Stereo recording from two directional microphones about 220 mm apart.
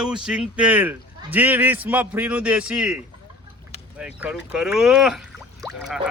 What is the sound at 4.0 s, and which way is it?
A man's voice, 5° right (ahead or behind).